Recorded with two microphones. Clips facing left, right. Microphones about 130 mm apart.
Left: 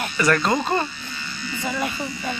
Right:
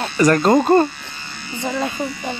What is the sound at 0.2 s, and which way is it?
Speech, 40° right (ahead or behind).